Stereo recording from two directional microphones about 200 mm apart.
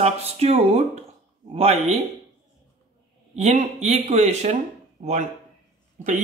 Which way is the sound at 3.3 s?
35° right (ahead or behind).